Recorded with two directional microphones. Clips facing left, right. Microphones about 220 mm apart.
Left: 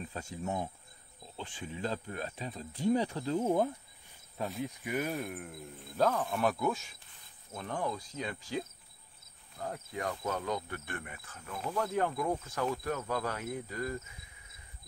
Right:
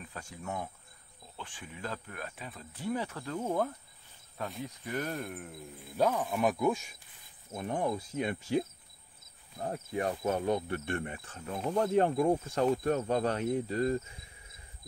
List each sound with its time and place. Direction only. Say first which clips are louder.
0.0 s speech: left 4 dB; 25° left (ahead or behind)
3.3 s cricket: left 2 dB; 15° left (ahead or behind)
4.4 s speech: left 2 dB; centre (ahead or behind); by 6.8 s 15° right (ahead or behind)
7.5 s insect: right 4 dB; 20° right (ahead or behind)